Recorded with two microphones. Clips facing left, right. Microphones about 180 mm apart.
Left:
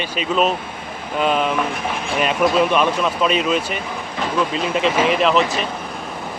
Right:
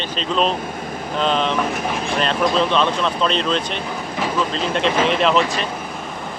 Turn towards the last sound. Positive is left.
turn(degrees=0)  # may be behind; listen again after turning